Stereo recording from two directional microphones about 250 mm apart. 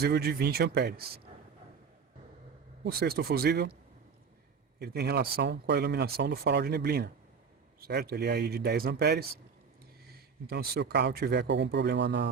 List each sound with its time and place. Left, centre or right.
0.0 s speech: right
2.8 s speech: right
4.8 s speech: right